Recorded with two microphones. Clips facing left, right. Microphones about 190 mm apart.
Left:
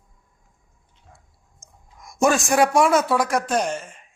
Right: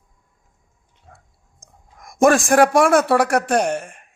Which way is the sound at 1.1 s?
65° right (ahead or behind).